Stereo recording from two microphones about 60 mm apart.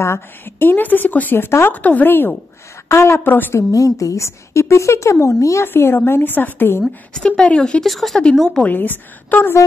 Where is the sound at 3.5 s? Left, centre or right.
Left.